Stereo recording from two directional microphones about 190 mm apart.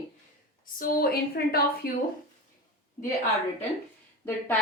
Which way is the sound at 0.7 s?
50° left (ahead or behind).